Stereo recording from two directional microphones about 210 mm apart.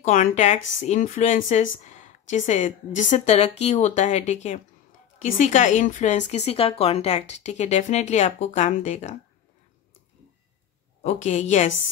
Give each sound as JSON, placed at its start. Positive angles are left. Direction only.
{"t": 0.0, "sound": "a woman's voice", "side_deg": 35}
{"t": 11.0, "sound": "a woman's voice", "side_deg": 35}